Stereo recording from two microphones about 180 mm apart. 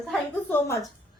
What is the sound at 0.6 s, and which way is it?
Speech, 15° left (ahead or behind).